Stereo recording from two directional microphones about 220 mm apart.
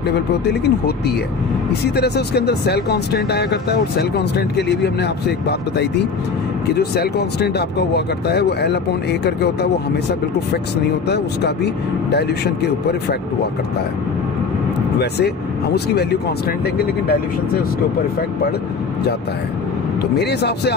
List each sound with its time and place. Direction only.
0.1 s speech: 50° left (ahead or behind)
11.1 s speech: 50° left (ahead or behind)
15.0 s speech: 50° left (ahead or behind)
20.0 s speech: 50° left (ahead or behind)